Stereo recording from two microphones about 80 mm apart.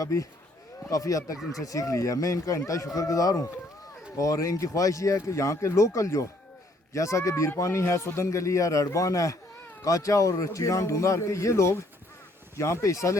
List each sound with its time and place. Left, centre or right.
0.0 s speech: left
1.4 s speech: centre
1.6 s speech: left